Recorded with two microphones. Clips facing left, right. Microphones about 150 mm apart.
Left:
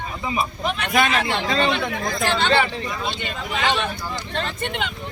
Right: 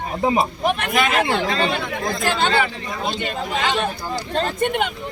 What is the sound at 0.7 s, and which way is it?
Speech, 50° right (ahead or behind).